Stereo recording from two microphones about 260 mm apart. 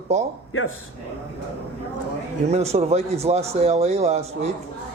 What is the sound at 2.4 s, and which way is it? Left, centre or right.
Speech, right.